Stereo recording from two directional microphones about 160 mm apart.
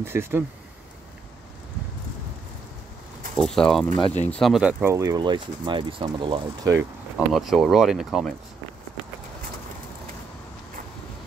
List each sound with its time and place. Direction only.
0.0 s speech: 15° right (ahead or behind)
3.3 s speech: 5° left (ahead or behind); by 6.7 s 35° right (ahead or behind)
7.2 s speech: centre (ahead or behind)